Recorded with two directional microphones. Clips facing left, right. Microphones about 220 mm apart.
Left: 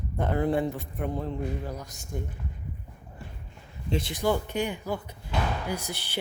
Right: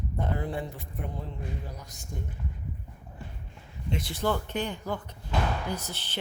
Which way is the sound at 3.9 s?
25° left (ahead or behind).